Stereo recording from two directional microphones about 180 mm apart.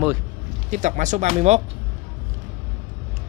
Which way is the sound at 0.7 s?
45° right (ahead or behind).